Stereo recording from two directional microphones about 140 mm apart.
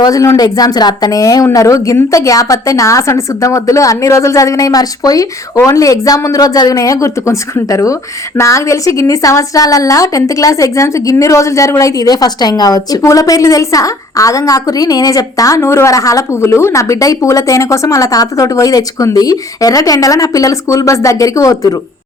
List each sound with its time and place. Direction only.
0.0 s a woman's voice: 25° left (ahead or behind)